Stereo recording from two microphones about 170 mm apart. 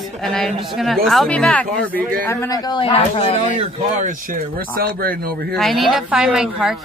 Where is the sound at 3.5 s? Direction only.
45° right (ahead or behind); by 5.3 s 60° right (ahead or behind).